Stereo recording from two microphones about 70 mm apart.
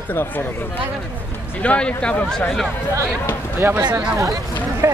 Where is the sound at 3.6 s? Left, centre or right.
Right.